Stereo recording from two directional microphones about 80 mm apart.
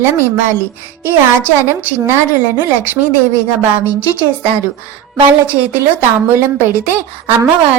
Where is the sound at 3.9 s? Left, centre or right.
Right.